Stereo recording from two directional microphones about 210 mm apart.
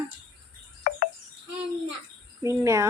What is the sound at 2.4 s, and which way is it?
Speech, 15° right (ahead or behind).